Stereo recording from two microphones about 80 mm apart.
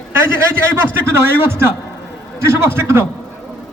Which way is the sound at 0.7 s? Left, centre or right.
Right.